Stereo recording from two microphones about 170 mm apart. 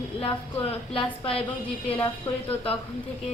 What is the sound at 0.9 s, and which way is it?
Speech, 35° left (ahead or behind).